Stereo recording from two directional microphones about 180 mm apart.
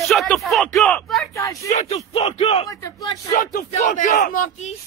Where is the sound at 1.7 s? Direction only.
45° left (ahead or behind).